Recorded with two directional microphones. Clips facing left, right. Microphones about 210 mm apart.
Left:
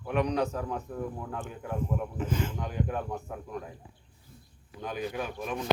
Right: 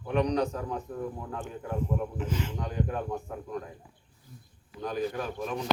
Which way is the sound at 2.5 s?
Centre (ahead or behind).